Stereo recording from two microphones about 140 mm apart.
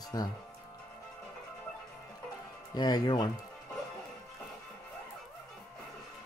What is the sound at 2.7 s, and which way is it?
Speech, 30° left (ahead or behind).